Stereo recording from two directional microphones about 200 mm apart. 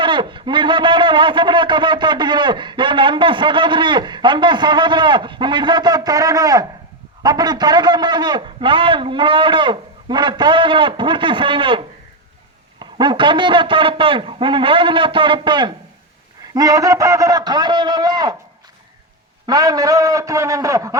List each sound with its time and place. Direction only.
0.0 s a man's voice: 25° right (ahead or behind)
12.8 s a man's voice: 20° right (ahead or behind)
19.5 s a man's voice: 20° right (ahead or behind)